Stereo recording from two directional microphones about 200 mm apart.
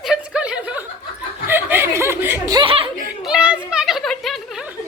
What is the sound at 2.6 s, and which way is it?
Chuckle, 30° right (ahead or behind).